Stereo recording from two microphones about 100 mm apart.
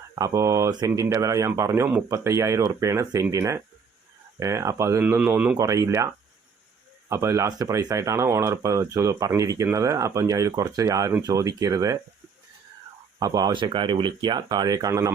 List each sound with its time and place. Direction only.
0.2 s speech: 30° right (ahead or behind)
5.0 s speech: 20° right (ahead or behind)
5.5 s speech: 35° right (ahead or behind)
7.1 s speech: 30° right (ahead or behind)
13.1 s speech: 40° right (ahead or behind)
13.5 s speech: 55° right (ahead or behind); by 15.1 s 35° right (ahead or behind)